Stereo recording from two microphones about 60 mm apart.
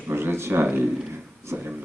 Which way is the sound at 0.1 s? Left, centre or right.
Right.